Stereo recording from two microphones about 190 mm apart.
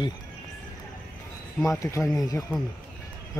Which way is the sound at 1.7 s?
15° left (ahead or behind).